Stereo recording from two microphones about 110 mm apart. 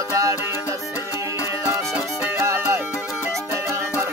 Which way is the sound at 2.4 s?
25° right (ahead or behind).